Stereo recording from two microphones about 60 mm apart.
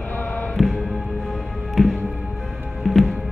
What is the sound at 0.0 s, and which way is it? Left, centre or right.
Music, left.